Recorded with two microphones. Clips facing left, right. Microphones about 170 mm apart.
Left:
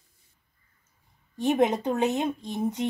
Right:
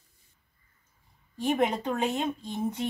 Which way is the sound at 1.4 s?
20° left (ahead or behind).